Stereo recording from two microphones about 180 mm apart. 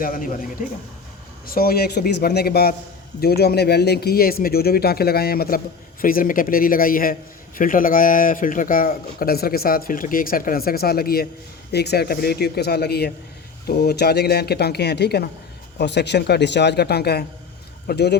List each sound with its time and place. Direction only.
0.0 s a man's voice: 50° left (ahead or behind)
1.5 s a man's voice: 55° left (ahead or behind)